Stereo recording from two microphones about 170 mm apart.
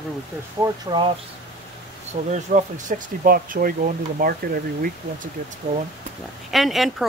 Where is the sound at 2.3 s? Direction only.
45° right (ahead or behind).